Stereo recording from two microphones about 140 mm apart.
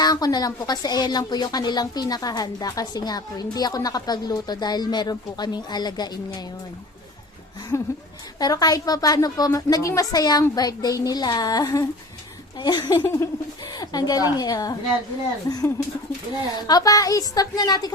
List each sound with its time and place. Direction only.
0.0 s speech: 25° left (ahead or behind)
7.7 s speech: 20° left (ahead or behind)
13.0 s speech: 20° left (ahead or behind)